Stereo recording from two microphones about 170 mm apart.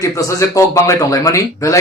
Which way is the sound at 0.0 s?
20° left (ahead or behind).